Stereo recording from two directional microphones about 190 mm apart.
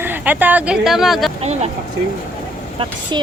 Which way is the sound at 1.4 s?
35° right (ahead or behind).